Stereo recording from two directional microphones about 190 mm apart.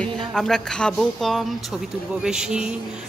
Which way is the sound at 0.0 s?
Centre (ahead or behind).